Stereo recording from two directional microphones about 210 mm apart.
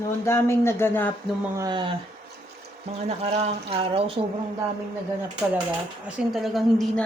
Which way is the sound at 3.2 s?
30° right (ahead or behind).